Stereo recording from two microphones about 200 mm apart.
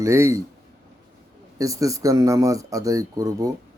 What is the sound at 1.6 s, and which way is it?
A man's voice, 15° right (ahead or behind).